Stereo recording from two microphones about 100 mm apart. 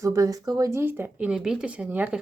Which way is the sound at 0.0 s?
35° right (ahead or behind).